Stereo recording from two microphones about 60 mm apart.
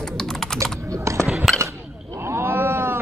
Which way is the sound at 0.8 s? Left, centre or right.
Right.